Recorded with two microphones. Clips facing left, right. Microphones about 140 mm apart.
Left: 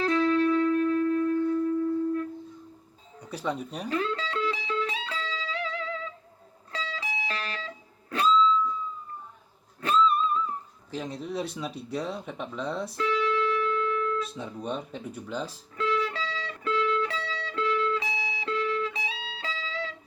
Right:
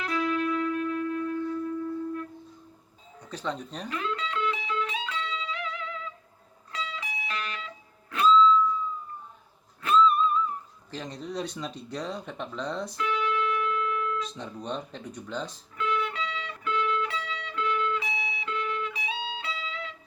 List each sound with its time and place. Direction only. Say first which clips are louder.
0.0 s music: left 5 dB; 30° left (ahead or behind)
3.2 s speech: left 2 dB; 10° left (ahead or behind)
3.8 s music: left 3 dB; 35° left (ahead or behind)
9.8 s music: right 2 dB; 35° left (ahead or behind)
10.9 s speech: left 2 dB; 5° left (ahead or behind)
13.0 s music: left 2 dB; 30° left (ahead or behind)
14.3 s speech: left 1 dB; 5° left (ahead or behind)
15.8 s music: left 1 dB; 35° left (ahead or behind)